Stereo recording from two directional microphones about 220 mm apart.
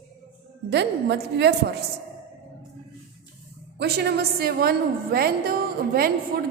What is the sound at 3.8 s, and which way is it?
A woman's voice, 50° right (ahead or behind).